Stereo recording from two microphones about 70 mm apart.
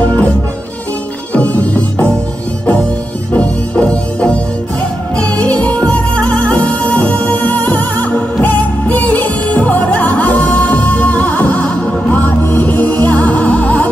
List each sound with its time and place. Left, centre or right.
0.0 s music: left
1.3 s music: centre
3.3 s music: centre